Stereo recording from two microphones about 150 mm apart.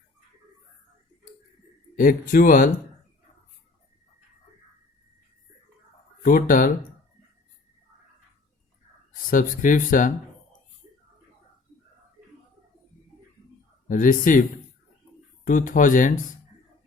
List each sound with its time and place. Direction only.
2.0 s speech: 65° left (ahead or behind)
6.2 s speech: 60° left (ahead or behind)
9.3 s speech: 65° left (ahead or behind)
13.8 s speech: 65° left (ahead or behind)
15.4 s speech: 60° left (ahead or behind)